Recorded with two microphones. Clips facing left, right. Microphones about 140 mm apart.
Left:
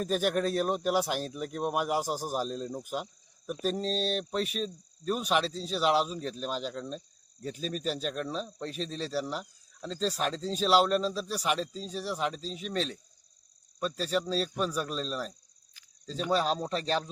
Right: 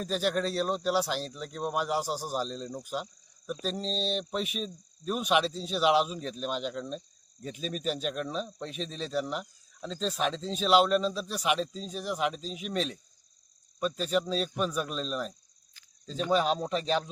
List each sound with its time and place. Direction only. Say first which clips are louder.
0.6 s speech: even; 10° left (ahead or behind)
2.0 s a man's voice: even; 50° left (ahead or behind)
2.2 s speech: left 1 dB; 10° left (ahead or behind)